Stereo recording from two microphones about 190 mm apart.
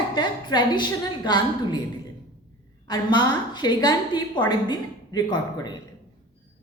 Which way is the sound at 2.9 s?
25° left (ahead or behind).